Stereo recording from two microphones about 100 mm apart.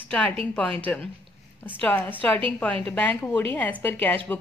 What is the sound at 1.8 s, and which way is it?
Speech, 20° left (ahead or behind).